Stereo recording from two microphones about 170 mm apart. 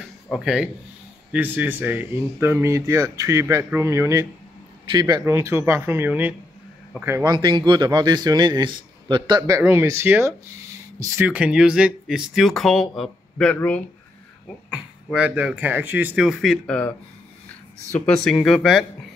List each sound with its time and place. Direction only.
0.3 s speech: 5° right (ahead or behind)
7.3 s speech: 25° right (ahead or behind)
9.5 s speech: 15° right (ahead or behind); by 13.7 s 10° left (ahead or behind)
14.7 s speech: 5° right (ahead or behind)
18.0 s speech: 5° left (ahead or behind)